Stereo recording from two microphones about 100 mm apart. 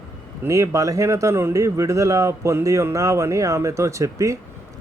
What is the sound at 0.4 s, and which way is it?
Speech, 30° right (ahead or behind).